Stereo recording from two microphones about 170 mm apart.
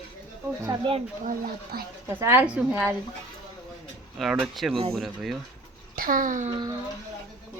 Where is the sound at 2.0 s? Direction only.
10° right (ahead or behind).